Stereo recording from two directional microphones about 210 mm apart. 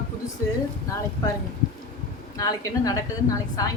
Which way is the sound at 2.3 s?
15° left (ahead or behind).